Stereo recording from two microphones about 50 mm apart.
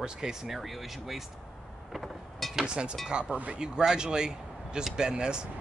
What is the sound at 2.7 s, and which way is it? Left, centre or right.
Speech, centre.